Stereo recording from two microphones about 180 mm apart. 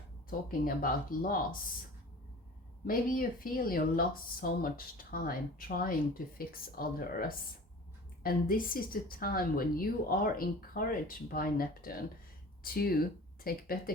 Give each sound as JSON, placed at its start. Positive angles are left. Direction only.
{"t": 0.3, "sound": "speech", "side_deg": 50}
{"t": 2.8, "sound": "speech", "side_deg": 50}